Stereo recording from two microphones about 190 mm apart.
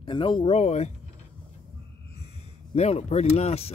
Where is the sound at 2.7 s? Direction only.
35° left (ahead or behind).